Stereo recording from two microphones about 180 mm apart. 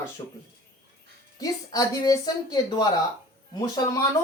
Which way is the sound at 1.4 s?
20° left (ahead or behind).